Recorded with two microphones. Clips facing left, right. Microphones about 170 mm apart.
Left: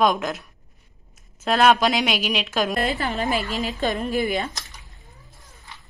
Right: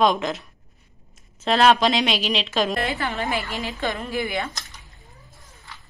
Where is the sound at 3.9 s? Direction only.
35° left (ahead or behind).